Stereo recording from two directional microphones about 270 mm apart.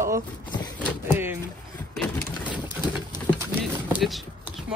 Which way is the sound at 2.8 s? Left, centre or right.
Centre.